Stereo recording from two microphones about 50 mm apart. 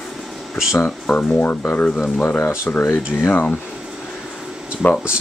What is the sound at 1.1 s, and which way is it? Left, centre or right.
Speech, left.